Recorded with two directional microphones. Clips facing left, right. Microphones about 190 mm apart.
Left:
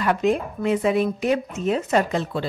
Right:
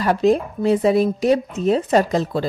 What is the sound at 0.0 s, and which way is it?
A woman's voice, 35° right (ahead or behind).